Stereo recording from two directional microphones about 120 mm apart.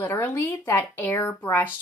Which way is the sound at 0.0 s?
20° left (ahead or behind).